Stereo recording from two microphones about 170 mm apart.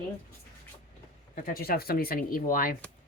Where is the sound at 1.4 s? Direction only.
55° left (ahead or behind).